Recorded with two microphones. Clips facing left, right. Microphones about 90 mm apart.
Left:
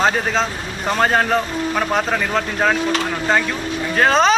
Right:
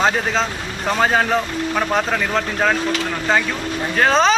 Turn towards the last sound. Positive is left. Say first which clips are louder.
# left 1 dB
turn(degrees=0)  # may be behind; listen again after turning